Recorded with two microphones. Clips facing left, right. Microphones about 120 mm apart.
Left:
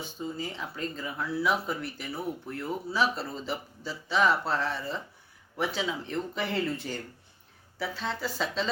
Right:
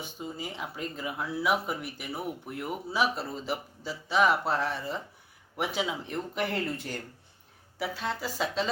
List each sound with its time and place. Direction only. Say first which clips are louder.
0.0 s speech: left 2 dB; 15° right (ahead or behind)